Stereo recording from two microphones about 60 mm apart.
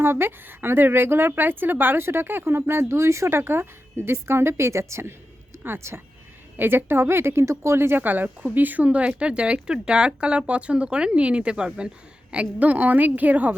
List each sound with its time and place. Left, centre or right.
0.0 s a woman's voice: right